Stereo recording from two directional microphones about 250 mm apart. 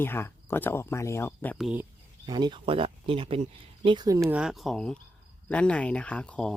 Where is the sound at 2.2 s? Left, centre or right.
Centre.